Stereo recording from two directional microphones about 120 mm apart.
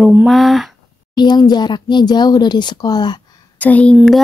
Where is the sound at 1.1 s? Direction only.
35° left (ahead or behind).